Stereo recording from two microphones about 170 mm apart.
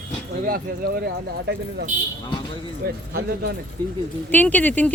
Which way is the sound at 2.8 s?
65° right (ahead or behind).